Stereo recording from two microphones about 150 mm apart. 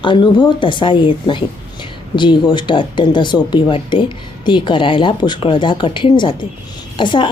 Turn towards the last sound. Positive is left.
turn(degrees=30)  # may be behind; listen again after turning